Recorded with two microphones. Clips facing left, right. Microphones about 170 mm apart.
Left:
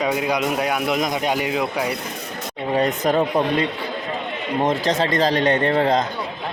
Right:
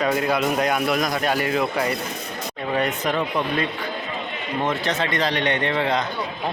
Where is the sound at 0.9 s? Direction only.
20° left (ahead or behind).